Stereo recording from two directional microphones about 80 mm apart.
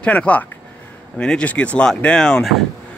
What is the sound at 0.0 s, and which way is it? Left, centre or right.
A man's voice, centre.